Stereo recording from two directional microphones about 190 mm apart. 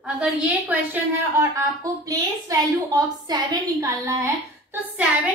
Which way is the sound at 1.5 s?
20° right (ahead or behind).